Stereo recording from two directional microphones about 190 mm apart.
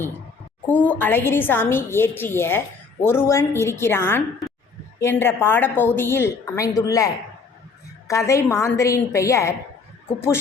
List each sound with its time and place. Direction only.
0.7 s a woman's voice: 10° left (ahead or behind)